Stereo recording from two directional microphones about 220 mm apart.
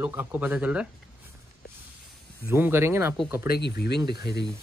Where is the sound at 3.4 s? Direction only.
45° left (ahead or behind).